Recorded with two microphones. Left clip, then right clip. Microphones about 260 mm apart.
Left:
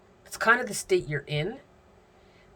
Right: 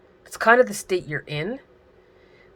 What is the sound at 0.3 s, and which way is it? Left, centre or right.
Speech, centre.